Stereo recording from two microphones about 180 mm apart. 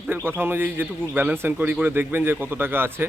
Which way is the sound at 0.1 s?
10° right (ahead or behind).